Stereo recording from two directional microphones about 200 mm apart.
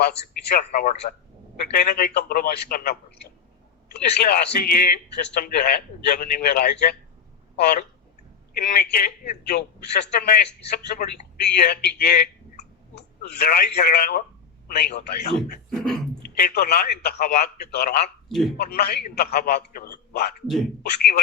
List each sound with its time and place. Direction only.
0.0 s a man's voice: 55° left (ahead or behind)
18.3 s speech: centre (ahead or behind)
18.5 s a man's voice: 55° left (ahead or behind)